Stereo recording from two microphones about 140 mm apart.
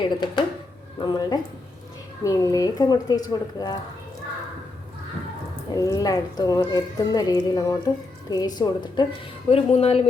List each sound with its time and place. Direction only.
0.0 s speech: 35° left (ahead or behind)
5.7 s speech: 25° left (ahead or behind)
9.5 s speech: 45° left (ahead or behind)